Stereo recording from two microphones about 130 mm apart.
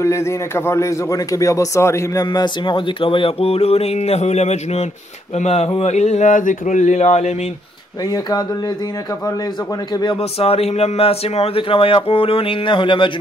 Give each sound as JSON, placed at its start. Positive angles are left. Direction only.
{"t": 0.0, "sound": "speech", "side_deg": 20}
{"t": 5.4, "sound": "a sound", "side_deg": 55}
{"t": 8.1, "sound": "speech", "side_deg": 30}
{"t": 10.4, "sound": "speech", "side_deg": 50}